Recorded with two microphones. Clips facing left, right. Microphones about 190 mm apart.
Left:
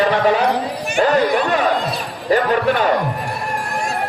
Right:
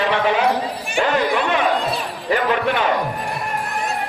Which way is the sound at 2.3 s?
40° left (ahead or behind).